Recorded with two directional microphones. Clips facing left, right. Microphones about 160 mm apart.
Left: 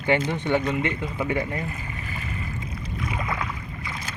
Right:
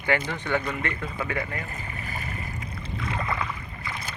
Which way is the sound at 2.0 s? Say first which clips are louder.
Left 1 dB; 35° right (ahead or behind).